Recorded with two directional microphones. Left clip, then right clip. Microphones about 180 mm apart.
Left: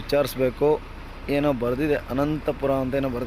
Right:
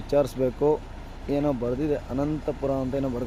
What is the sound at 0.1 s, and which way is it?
Speech, 10° right (ahead or behind).